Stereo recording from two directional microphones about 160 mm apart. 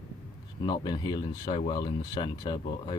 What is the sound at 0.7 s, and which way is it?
Speech, 25° left (ahead or behind).